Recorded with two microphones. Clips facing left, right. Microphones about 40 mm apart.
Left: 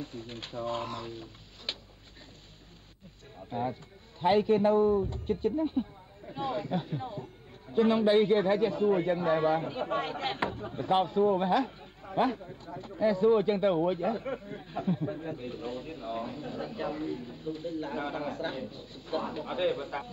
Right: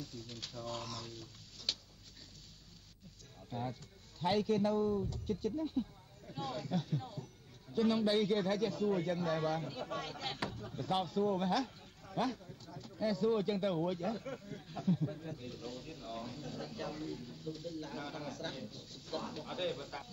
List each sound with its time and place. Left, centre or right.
0.0 s a man's voice: left
3.4 s a man's voice: left